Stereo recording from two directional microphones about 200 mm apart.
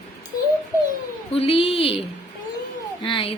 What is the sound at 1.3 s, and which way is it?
Speech, 30° left (ahead or behind).